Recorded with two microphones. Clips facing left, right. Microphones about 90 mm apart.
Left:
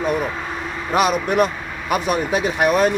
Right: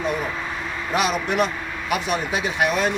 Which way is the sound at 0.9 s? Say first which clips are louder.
Left 4 dB; 45° left (ahead or behind).